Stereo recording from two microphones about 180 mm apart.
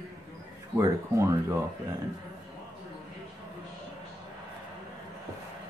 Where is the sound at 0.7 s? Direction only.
15° right (ahead or behind).